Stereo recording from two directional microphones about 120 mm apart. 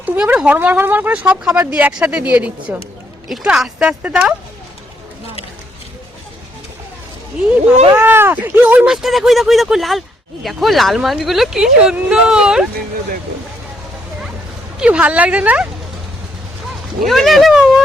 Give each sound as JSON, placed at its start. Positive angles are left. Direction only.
{"t": 0.0, "sound": "speech", "side_deg": -10}
{"t": 7.9, "sound": "speech", "side_deg": -15}
{"t": 8.9, "sound": "speech", "side_deg": 0}
{"t": 14.8, "sound": "speech", "side_deg": -10}
{"t": 17.1, "sound": "speech", "side_deg": 0}